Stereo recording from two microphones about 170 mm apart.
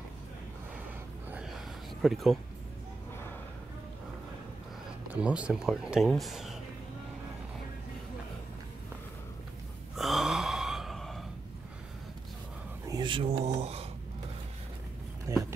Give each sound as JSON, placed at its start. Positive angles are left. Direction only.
{"t": 1.3, "sound": "a sound", "side_deg": 0}
{"t": 5.1, "sound": "speech", "side_deg": -5}
{"t": 9.9, "sound": "gasp", "side_deg": 0}
{"t": 12.8, "sound": "speech", "side_deg": -25}
{"t": 15.3, "sound": "speech", "side_deg": -15}